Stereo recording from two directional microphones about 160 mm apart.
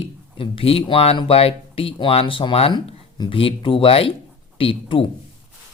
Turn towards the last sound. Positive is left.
turn(degrees=35)  # may be behind; listen again after turning